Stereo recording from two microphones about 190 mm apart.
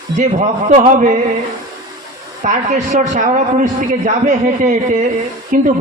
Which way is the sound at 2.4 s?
40° right (ahead or behind).